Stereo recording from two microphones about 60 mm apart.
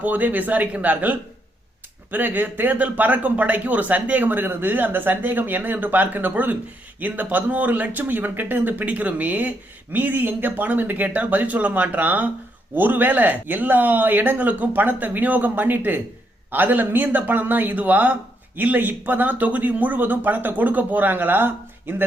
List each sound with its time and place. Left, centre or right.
0.0 s speech: right